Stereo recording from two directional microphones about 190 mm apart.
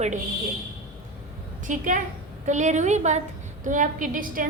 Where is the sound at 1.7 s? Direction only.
45° right (ahead or behind).